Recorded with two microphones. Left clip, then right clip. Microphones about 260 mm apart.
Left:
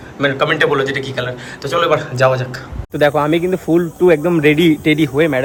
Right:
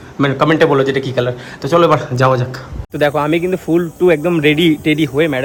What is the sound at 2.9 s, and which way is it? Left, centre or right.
Speech, centre.